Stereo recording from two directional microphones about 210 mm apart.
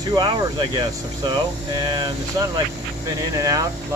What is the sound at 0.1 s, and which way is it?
Speech, 20° right (ahead or behind).